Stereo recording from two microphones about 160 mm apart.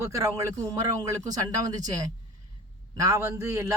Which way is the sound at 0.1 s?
20° right (ahead or behind).